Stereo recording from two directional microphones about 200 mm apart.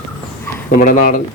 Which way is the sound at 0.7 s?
40° left (ahead or behind).